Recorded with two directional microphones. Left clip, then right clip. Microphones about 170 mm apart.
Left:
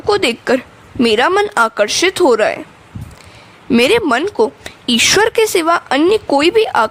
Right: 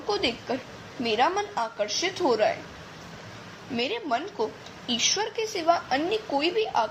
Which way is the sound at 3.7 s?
60° left (ahead or behind).